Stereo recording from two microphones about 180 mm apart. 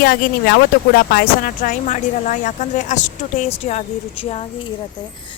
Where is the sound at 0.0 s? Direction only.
60° left (ahead or behind).